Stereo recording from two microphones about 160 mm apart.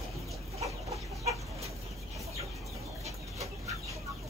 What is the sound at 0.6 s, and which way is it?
Chicken, 20° right (ahead or behind).